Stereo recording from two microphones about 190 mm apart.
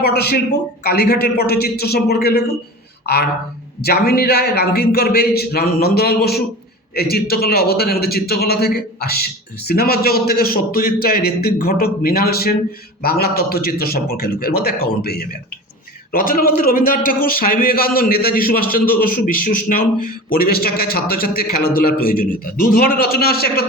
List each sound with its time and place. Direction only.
0.0 s a man's voice: 55° left (ahead or behind)
3.8 s a man's voice: 55° left (ahead or behind)